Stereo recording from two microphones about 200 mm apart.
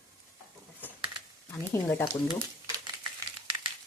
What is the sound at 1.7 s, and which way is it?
Speech, 15° left (ahead or behind).